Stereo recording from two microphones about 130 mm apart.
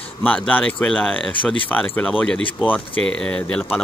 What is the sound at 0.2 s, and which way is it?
Speech, 10° left (ahead or behind).